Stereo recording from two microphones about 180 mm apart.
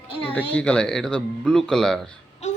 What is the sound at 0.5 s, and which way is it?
Speech, 5° left (ahead or behind).